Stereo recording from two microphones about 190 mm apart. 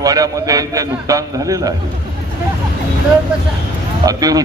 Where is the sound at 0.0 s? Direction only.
20° right (ahead or behind).